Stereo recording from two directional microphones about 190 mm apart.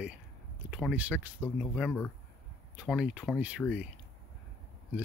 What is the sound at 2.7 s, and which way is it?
Speech, 5° right (ahead or behind).